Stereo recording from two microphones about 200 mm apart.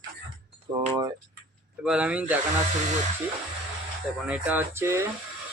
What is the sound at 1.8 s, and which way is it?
Speech, 5° right (ahead or behind).